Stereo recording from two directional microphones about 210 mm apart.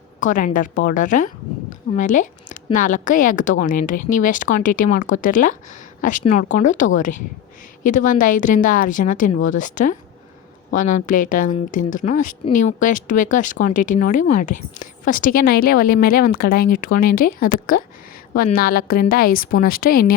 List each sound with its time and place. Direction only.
0.2 s a woman's voice: 35° left (ahead or behind)